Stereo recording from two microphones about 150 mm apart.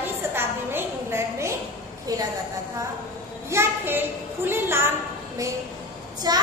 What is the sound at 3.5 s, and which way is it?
A woman's voice, 15° right (ahead or behind).